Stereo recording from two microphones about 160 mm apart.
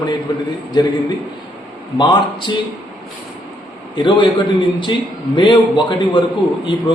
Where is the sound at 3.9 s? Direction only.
30° left (ahead or behind).